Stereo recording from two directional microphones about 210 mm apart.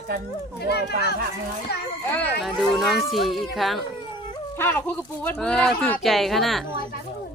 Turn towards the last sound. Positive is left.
turn(degrees=0)  # may be behind; listen again after turning